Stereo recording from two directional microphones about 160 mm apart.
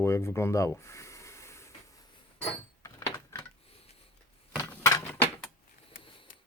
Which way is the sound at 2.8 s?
15° left (ahead or behind).